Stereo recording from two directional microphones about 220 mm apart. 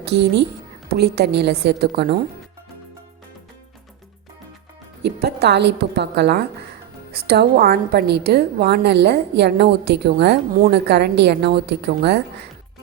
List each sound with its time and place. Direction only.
0.0 s a woman's voice: 50° right (ahead or behind)
5.2 s a woman's voice: 50° right (ahead or behind)